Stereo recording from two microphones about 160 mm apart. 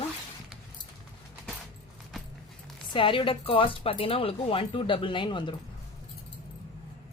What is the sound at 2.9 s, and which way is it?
Speech, 35° left (ahead or behind).